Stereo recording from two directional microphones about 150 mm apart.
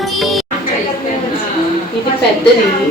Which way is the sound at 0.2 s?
Centre (ahead or behind).